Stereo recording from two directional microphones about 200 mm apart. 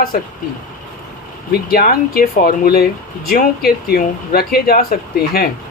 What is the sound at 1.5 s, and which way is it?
Speech, 50° left (ahead or behind).